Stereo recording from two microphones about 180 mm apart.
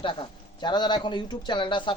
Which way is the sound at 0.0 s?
30° left (ahead or behind).